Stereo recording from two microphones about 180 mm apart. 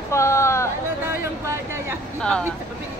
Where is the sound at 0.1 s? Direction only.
15° left (ahead or behind).